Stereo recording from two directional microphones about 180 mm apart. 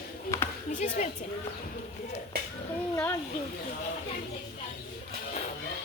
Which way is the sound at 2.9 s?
15° left (ahead or behind).